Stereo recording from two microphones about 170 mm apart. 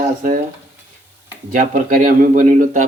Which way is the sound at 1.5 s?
50° right (ahead or behind).